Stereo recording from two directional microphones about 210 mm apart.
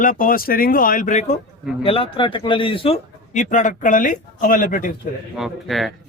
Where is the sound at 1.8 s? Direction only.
25° left (ahead or behind).